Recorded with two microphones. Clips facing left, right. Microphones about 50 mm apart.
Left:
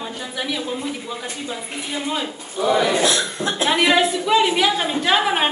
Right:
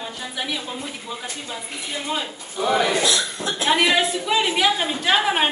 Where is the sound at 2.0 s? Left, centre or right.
Centre.